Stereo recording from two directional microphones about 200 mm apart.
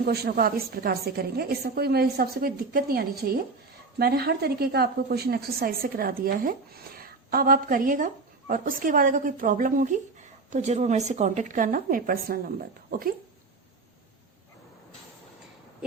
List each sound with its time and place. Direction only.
0.0 s a woman's voice: 50° right (ahead or behind)